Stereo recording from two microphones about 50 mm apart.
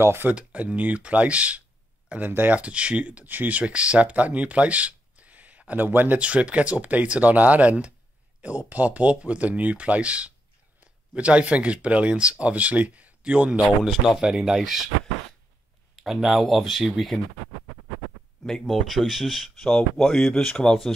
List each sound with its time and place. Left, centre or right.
0.0 s speech: right
0.3 s speech: right
2.6 s speech: right
6.1 s speech: right
14.3 s speech: centre
16.0 s speech: centre
18.4 s speech: centre
19.6 s speech: centre